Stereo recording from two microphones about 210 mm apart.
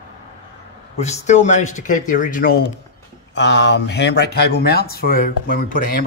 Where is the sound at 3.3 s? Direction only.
55° left (ahead or behind); by 5.8 s 40° left (ahead or behind).